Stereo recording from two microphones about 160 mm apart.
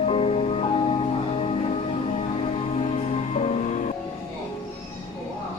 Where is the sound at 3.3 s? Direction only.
40° left (ahead or behind).